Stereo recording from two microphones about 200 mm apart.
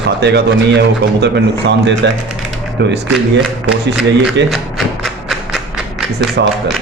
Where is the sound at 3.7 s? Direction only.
60° right (ahead or behind).